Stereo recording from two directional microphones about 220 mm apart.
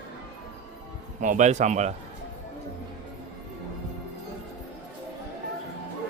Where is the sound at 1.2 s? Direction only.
35° right (ahead or behind).